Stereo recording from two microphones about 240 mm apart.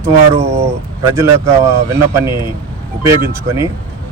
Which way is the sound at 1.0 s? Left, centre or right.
Centre.